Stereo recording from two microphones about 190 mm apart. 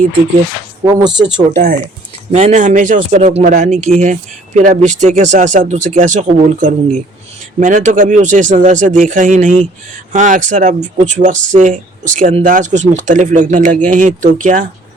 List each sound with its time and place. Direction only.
0.9 s speech: 25° right (ahead or behind)
1.5 s speech: 40° right (ahead or behind)